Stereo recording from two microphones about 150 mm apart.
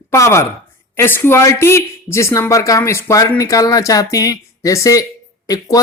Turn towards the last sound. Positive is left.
turn(degrees=25)  # may be behind; listen again after turning